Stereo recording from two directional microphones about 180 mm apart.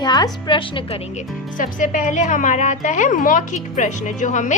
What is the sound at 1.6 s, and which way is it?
A woman's voice, 45° left (ahead or behind).